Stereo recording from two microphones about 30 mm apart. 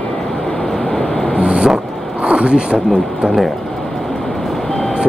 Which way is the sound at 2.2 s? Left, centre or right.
Right.